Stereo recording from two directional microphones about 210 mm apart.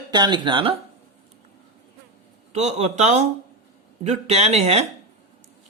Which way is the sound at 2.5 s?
35° right (ahead or behind).